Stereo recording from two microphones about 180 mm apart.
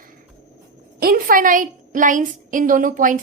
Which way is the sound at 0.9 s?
55° right (ahead or behind).